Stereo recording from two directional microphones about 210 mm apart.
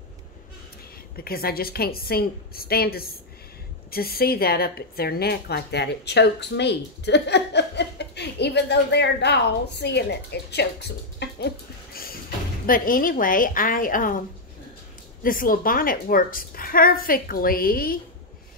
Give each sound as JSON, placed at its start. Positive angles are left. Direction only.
{"t": 1.1, "sound": "a woman's voice", "side_deg": 45}
{"t": 15.2, "sound": "a woman's voice", "side_deg": 40}